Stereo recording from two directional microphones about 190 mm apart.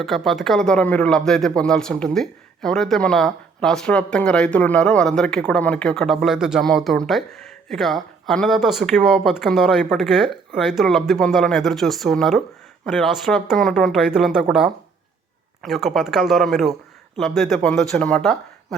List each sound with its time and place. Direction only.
0.0 s speech: centre (ahead or behind)